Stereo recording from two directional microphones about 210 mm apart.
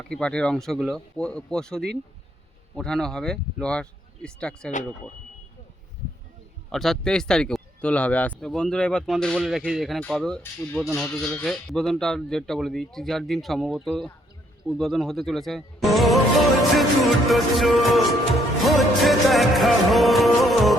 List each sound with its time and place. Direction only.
0.1 s speech: 5° left (ahead or behind)
6.7 s speech: centre (ahead or behind)
18.6 s music: centre (ahead or behind)